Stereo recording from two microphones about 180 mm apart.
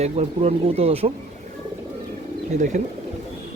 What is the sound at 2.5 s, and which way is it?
Speech, 45° right (ahead or behind).